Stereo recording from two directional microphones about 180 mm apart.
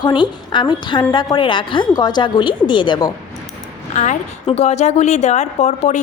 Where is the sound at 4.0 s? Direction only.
40° left (ahead or behind).